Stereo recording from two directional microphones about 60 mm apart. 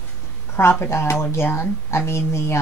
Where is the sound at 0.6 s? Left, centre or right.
Left.